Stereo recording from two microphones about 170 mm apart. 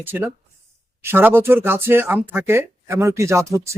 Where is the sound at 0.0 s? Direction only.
15° right (ahead or behind).